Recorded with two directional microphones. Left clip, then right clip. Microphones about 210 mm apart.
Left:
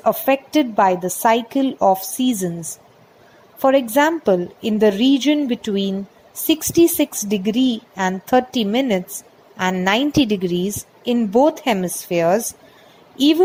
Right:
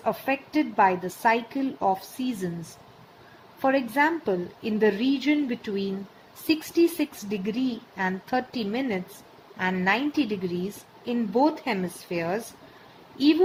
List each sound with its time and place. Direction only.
0.0 s speech: 35° left (ahead or behind)
3.6 s speech: 30° left (ahead or behind)